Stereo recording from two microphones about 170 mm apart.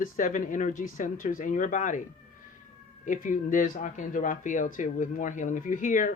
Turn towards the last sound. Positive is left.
turn(degrees=50)  # may be behind; listen again after turning